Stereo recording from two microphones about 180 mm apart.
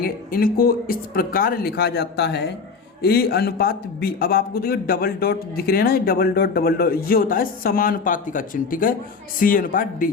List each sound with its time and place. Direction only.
0.0 s a man's voice: 55° left (ahead or behind)